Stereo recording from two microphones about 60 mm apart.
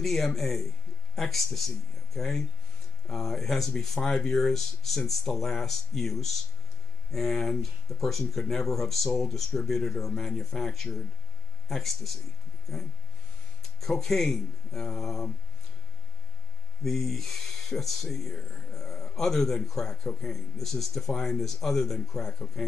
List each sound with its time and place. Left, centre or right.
0.0 s speech: centre
13.7 s speech: centre
16.8 s speech: centre